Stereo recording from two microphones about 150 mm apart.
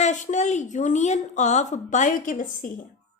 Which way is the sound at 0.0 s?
55° left (ahead or behind).